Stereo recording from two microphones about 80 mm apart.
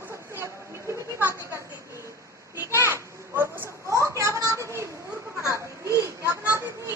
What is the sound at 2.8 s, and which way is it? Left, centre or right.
Children playing, right.